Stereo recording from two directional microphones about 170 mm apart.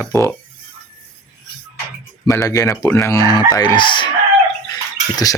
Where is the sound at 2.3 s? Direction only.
20° left (ahead or behind).